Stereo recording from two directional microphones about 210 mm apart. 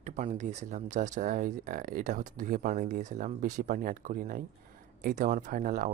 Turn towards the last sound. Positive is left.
turn(degrees=-40)  # may be behind; listen again after turning